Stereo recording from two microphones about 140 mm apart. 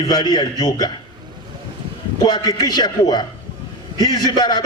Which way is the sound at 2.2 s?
30° left (ahead or behind).